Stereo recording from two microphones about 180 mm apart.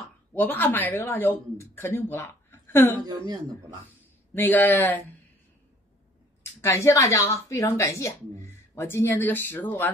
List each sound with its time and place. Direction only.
0.3 s speech: 10° left (ahead or behind)
3.1 s speech: 25° right (ahead or behind)
4.3 s speech: 10° left (ahead or behind)
6.6 s speech: 15° left (ahead or behind)